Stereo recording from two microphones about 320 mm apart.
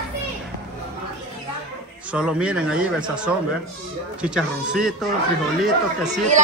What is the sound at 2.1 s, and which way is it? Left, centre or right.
Speech, centre.